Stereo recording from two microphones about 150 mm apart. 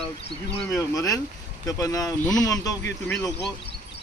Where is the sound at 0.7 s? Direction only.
20° left (ahead or behind).